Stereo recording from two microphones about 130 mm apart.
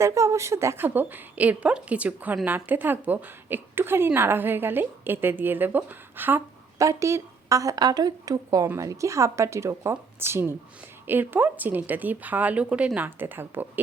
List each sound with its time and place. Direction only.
0.0 s a woman's voice: 20° right (ahead or behind)